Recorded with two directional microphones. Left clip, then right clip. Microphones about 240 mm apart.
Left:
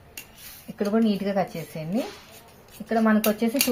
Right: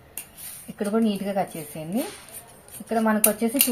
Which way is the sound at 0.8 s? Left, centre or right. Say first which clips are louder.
Left 1 dB; centre.